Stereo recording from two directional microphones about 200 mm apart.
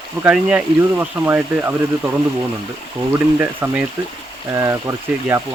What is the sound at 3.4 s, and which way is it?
Speech, 10° right (ahead or behind).